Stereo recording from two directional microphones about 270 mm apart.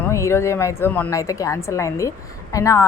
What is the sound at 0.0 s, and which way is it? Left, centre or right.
A woman's voice, centre.